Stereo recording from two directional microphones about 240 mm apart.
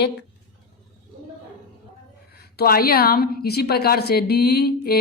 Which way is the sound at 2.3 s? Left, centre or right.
Left.